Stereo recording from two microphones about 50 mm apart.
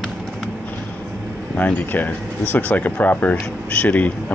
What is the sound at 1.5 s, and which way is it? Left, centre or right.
Speech, left.